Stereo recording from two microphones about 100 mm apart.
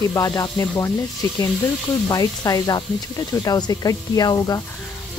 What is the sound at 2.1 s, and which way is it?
Speech, 40° left (ahead or behind).